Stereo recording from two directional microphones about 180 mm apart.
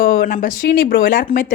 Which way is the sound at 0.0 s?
50° left (ahead or behind).